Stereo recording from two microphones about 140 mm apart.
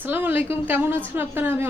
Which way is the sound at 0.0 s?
15° right (ahead or behind).